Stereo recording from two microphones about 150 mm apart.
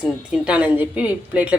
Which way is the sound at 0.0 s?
5° right (ahead or behind).